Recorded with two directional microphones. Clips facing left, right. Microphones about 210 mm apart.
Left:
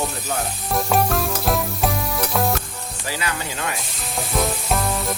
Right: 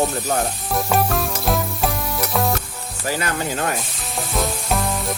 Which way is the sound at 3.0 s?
50° right (ahead or behind).